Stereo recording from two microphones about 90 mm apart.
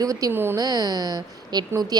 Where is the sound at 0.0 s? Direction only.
40° right (ahead or behind).